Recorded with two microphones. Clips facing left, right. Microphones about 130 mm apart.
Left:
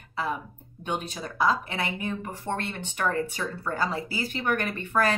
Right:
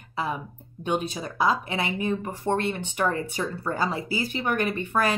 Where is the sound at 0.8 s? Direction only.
15° right (ahead or behind).